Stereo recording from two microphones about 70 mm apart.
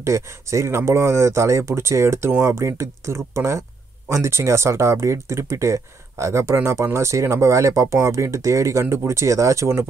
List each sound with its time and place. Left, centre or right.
0.0 s speech: right